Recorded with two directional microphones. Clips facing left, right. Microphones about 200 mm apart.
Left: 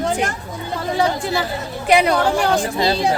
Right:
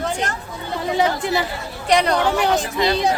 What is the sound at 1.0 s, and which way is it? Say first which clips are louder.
Speech: even; 20° right (ahead or behind).